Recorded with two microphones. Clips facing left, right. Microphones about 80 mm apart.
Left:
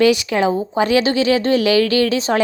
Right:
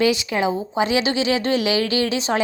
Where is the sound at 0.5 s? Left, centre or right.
Left.